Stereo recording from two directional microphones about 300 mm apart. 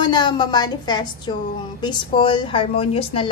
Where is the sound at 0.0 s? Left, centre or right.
Centre.